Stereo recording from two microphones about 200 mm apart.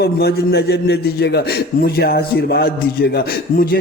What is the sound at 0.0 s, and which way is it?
A man's voice, 50° left (ahead or behind).